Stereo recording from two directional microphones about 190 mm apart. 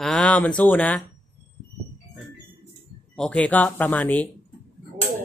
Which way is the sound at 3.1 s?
5° left (ahead or behind).